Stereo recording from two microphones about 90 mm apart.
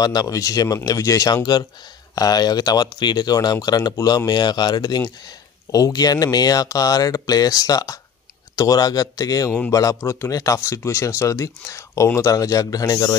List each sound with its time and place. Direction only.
0.0 s speech: 45° left (ahead or behind)